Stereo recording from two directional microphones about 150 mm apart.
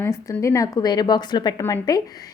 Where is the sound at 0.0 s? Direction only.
20° left (ahead or behind).